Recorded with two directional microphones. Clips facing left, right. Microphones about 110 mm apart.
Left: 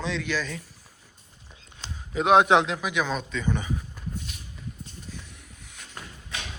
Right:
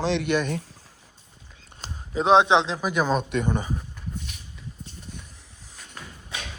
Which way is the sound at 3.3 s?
55° right (ahead or behind).